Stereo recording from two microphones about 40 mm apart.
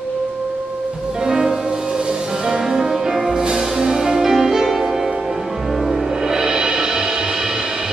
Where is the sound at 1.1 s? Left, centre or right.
Centre.